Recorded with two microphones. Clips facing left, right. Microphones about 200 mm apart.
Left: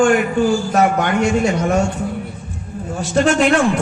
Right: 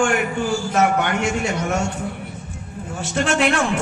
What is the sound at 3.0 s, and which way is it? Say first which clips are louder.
Speech: left 5 dB; 40° left (ahead or behind).